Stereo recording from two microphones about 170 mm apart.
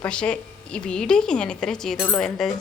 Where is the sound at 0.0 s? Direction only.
5° left (ahead or behind).